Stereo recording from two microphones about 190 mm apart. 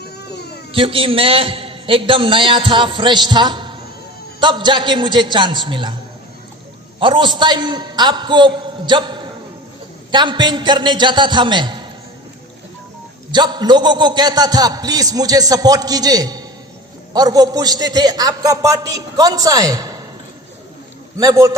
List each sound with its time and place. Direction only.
0.7 s a man's voice: 30° right (ahead or behind)
7.0 s a man's voice: 25° right (ahead or behind)
13.3 s a man's voice: 25° right (ahead or behind)
21.2 s a man's voice: 20° right (ahead or behind)